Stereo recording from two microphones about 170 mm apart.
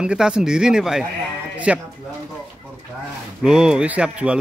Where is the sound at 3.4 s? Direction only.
5° right (ahead or behind).